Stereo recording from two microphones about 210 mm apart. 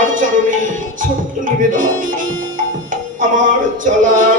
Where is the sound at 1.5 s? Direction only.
40° right (ahead or behind).